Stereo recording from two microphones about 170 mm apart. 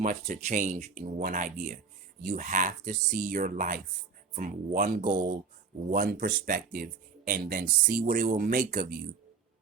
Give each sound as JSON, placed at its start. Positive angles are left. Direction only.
{"t": 0.0, "sound": "speech", "side_deg": -50}